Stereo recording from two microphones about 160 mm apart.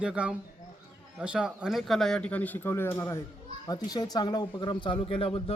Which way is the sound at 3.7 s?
25° left (ahead or behind).